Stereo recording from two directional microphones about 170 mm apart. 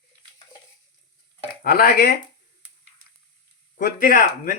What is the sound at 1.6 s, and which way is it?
Speech, 60° left (ahead or behind).